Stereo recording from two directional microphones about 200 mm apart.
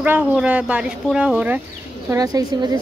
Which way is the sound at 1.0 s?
5° right (ahead or behind).